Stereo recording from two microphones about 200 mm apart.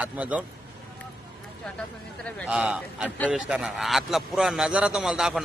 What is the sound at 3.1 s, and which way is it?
A man's voice, 5° left (ahead or behind).